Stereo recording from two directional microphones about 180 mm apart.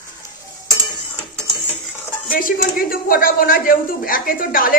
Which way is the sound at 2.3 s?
55° left (ahead or behind).